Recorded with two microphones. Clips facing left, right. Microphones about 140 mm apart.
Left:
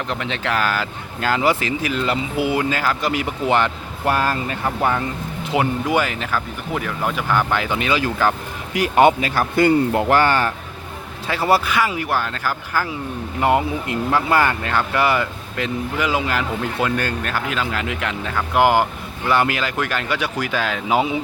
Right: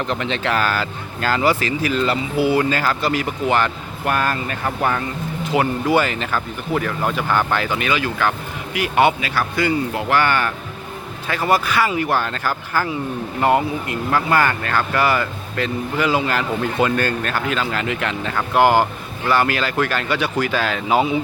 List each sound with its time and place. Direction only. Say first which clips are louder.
0.1 s speech: even; 5° left (ahead or behind)
7.8 s speech: left 1 dB; 25° left (ahead or behind)
8.7 s speech: left 2 dB; 40° left (ahead or behind)
11.8 s speech: right 2 dB; 5° left (ahead or behind)
13.4 s speech: right 1 dB; 15° left (ahead or behind)